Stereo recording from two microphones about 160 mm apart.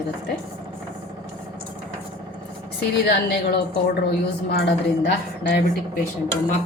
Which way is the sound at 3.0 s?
85° left.